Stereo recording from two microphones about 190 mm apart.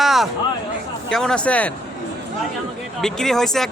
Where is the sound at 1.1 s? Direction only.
5° left (ahead or behind).